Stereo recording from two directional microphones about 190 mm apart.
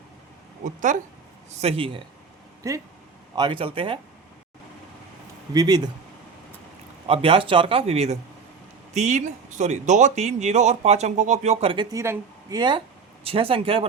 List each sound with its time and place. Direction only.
0.6 s speech: 40° right (ahead or behind)
1.5 s speech: 30° right (ahead or behind)
2.6 s speech: 15° right (ahead or behind)
5.5 s speech: 20° right (ahead or behind)
7.1 s speech: 30° right (ahead or behind)